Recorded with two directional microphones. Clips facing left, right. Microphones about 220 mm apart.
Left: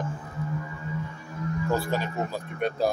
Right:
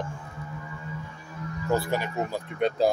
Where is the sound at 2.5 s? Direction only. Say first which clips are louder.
Right 3 dB; 20° right (ahead or behind).